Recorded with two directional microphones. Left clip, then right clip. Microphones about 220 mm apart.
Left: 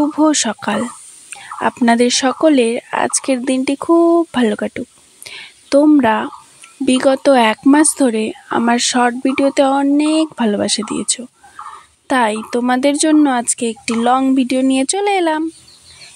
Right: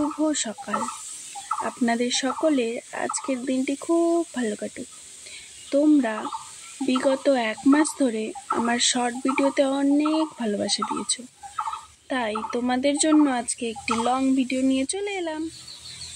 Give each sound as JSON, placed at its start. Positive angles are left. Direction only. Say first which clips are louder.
{"t": 0.2, "sound": "speech", "louder": "left 11 dB", "side_deg": 40}